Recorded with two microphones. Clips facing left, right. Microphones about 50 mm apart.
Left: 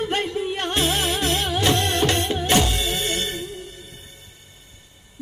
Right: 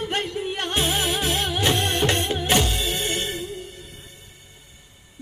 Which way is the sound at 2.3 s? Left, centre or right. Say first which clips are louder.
Left 2 dB; centre.